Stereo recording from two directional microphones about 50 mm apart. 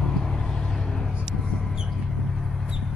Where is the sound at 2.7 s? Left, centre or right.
Centre.